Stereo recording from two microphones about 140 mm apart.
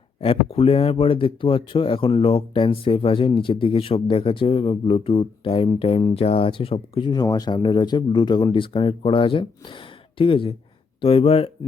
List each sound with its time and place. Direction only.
0.2 s speech: 40° left (ahead or behind)
7.1 s speech: 25° left (ahead or behind); by 11.5 s 45° left (ahead or behind)